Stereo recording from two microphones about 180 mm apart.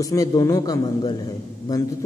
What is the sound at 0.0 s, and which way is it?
A man's voice, 20° left (ahead or behind).